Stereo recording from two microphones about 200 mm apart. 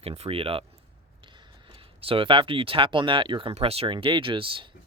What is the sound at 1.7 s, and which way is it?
Speech, 25° right (ahead or behind).